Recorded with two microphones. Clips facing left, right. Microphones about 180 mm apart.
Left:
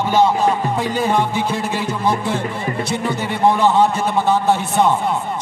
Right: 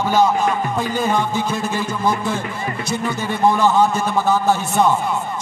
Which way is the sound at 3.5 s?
30° left (ahead or behind).